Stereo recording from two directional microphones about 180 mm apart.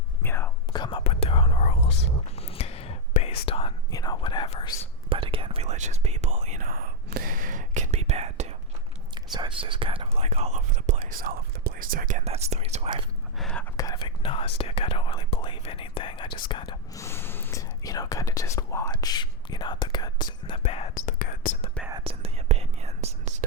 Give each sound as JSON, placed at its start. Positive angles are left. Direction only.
{"t": 0.2, "sound": "whispering", "side_deg": 15}
{"t": 0.7, "sound": "whispering", "side_deg": 25}
{"t": 2.4, "sound": "a sound", "side_deg": 35}
{"t": 3.1, "sound": "whispering", "side_deg": 45}
{"t": 3.4, "sound": "whispering", "side_deg": 30}
{"t": 5.0, "sound": "whispering", "side_deg": -30}
{"t": 9.1, "sound": "whispering", "side_deg": -25}
{"t": 13.4, "sound": "whispering", "side_deg": 5}
{"t": 13.7, "sound": "whispering", "side_deg": 20}
{"t": 20.6, "sound": "whispering", "side_deg": 35}
{"t": 20.9, "sound": "whispering", "side_deg": 50}
{"t": 22.0, "sound": "whispering", "side_deg": -35}